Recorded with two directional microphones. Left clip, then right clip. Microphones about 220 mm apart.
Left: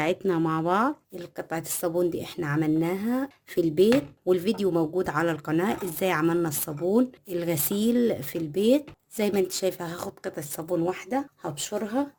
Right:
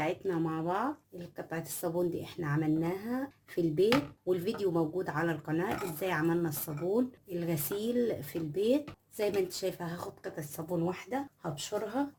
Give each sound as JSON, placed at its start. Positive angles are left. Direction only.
{"t": 0.0, "sound": "speech", "side_deg": 50}